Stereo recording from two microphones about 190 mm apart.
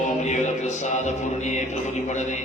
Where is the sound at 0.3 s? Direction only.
35° left (ahead or behind).